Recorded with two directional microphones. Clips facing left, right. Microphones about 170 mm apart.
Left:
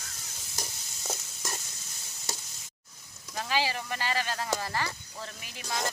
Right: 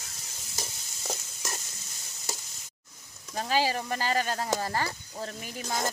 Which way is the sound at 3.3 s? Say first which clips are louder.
Right 3 dB; 40° right (ahead or behind).